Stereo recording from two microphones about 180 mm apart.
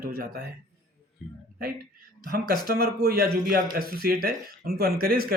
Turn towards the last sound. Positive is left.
turn(degrees=-55)  # may be behind; listen again after turning